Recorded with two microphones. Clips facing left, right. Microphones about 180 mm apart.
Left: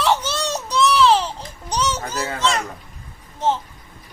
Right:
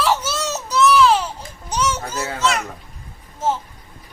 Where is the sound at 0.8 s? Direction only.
30° left (ahead or behind).